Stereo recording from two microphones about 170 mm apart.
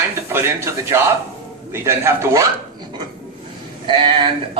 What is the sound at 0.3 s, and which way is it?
A man's voice, 15° right (ahead or behind).